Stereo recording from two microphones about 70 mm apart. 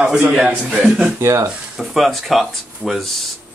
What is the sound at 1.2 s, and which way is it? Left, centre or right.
Speech, right.